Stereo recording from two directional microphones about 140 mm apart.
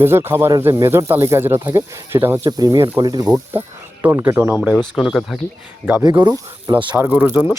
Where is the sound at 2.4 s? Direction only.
25° right (ahead or behind).